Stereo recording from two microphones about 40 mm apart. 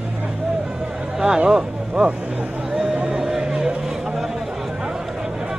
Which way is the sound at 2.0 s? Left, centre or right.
Right.